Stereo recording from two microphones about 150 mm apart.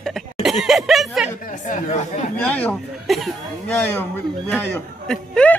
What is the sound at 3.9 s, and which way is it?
A man's voice, 10° left (ahead or behind).